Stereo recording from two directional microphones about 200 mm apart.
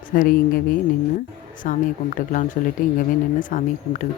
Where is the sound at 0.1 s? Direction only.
45° left (ahead or behind).